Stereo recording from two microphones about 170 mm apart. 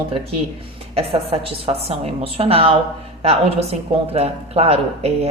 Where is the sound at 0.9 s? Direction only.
35° right (ahead or behind).